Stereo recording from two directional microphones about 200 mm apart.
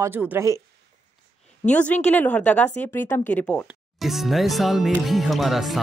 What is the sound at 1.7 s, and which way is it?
Speech, 5° left (ahead or behind).